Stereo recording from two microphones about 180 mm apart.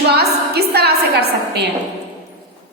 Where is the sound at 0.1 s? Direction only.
65° right (ahead or behind).